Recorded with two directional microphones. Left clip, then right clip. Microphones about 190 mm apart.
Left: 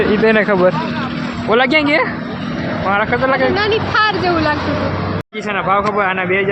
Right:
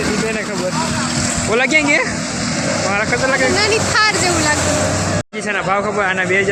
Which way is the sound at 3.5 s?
50° left (ahead or behind).